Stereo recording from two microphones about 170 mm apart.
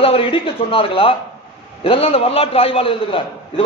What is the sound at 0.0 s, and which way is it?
A man's voice, 30° left (ahead or behind).